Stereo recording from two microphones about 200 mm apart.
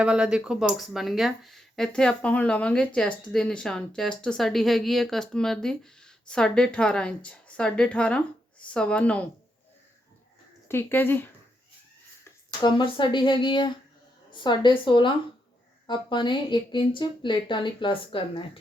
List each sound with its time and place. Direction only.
0.0 s speech: 5° right (ahead or behind)
10.7 s speech: 10° left (ahead or behind)
12.2 s a woman's voice: 20° left (ahead or behind)